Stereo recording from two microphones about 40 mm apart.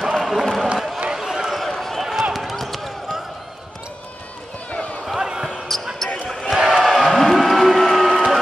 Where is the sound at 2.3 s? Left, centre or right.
Centre.